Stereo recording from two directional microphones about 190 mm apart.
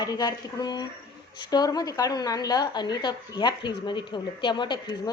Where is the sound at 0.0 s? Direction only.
20° left (ahead or behind).